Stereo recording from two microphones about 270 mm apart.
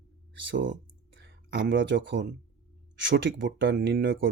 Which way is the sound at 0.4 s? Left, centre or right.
Right.